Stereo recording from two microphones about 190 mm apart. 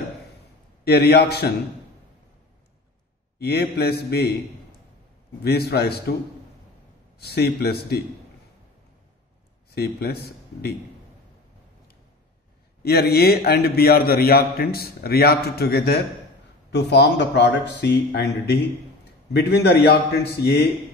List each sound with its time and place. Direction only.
0.8 s a man's voice: 55° left (ahead or behind)
3.3 s a man's voice: 55° left (ahead or behind)
5.4 s a man's voice: 55° left (ahead or behind)
7.2 s a man's voice: 55° left (ahead or behind)
9.7 s speech: 55° left (ahead or behind)
12.8 s a man's voice: 55° left (ahead or behind)